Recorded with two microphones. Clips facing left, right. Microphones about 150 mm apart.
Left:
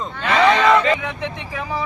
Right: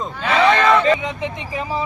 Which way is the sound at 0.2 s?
Centre (ahead or behind).